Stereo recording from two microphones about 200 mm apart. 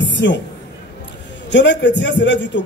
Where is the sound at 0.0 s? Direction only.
65° left (ahead or behind).